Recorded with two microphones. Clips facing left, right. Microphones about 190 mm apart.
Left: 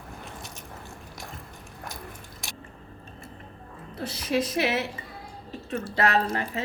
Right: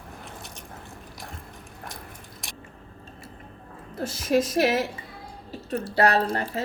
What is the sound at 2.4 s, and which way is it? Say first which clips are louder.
Biting: left 2 dB; centre (ahead or behind).